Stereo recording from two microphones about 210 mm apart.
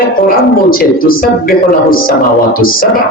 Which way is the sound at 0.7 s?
45° left (ahead or behind).